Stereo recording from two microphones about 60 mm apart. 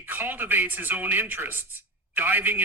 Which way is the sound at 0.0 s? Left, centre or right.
Right.